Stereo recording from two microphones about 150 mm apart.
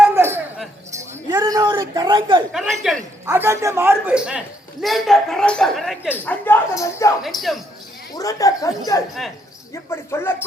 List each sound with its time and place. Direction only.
0.1 s a sound: 15° right (ahead or behind); by 2.4 s 30° right (ahead or behind)
2.5 s a man's voice: centre (ahead or behind)
3.2 s a man's voice: 15° right (ahead or behind); by 6.0 s centre (ahead or behind)
6.2 s a woman's voice: 15° left (ahead or behind)
8.1 s a woman's voice: 20° left (ahead or behind)